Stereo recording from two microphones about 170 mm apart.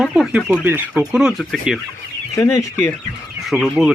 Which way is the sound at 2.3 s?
20° left (ahead or behind).